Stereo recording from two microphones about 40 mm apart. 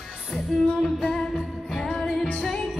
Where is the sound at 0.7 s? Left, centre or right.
Centre.